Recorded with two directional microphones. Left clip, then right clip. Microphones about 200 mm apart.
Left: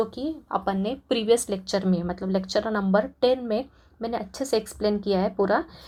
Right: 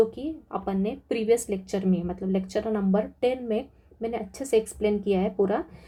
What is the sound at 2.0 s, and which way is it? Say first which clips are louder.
Speech: left 2 dB; 20° left (ahead or behind).